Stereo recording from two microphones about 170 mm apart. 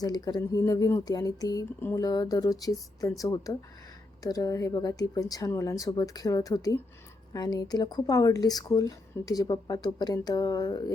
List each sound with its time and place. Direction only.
0.0 s speech: 25° left (ahead or behind)